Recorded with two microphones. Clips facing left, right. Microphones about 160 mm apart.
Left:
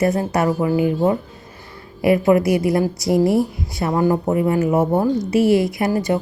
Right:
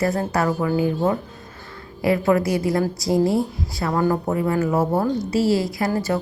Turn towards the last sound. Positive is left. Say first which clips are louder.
# left 3 dB
turn(degrees=20)  # may be behind; listen again after turning